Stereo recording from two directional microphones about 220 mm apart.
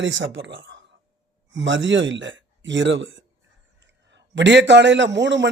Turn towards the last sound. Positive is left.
turn(degrees=-55)  # may be behind; listen again after turning